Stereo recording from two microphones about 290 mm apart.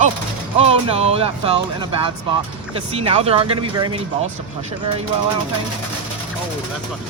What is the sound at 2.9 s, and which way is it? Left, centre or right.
Speech, centre.